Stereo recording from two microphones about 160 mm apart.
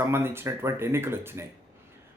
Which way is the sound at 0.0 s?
15° right (ahead or behind).